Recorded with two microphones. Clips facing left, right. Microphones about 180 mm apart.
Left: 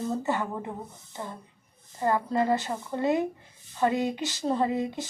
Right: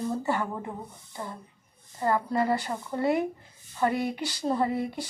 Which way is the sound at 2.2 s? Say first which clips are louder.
Left 1 dB; 20° left (ahead or behind).